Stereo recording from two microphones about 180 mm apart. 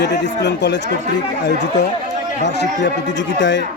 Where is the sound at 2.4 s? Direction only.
80° left.